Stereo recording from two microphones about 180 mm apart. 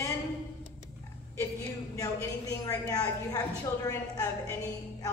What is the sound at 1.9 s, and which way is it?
A woman's voice, 20° left (ahead or behind).